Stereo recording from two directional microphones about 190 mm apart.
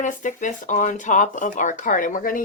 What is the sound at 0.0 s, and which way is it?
Speech, 40° left (ahead or behind).